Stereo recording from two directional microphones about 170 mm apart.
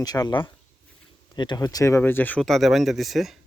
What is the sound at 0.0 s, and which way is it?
A man's voice, 25° left (ahead or behind).